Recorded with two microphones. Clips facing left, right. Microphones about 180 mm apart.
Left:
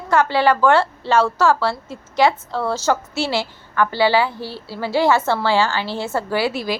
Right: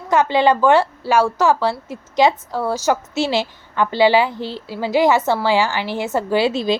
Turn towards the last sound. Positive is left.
turn(degrees=-25)  # may be behind; listen again after turning